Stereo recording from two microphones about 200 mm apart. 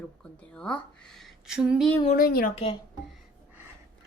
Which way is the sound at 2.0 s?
45° left (ahead or behind).